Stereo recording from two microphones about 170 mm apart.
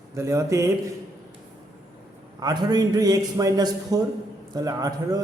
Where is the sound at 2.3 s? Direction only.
25° right (ahead or behind).